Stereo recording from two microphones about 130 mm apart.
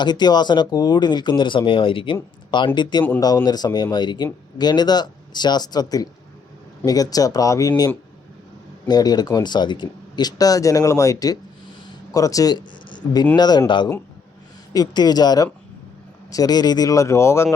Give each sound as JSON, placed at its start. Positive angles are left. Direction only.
{"t": 0.0, "sound": "speech", "side_deg": 35}
{"t": 8.9, "sound": "speech", "side_deg": 30}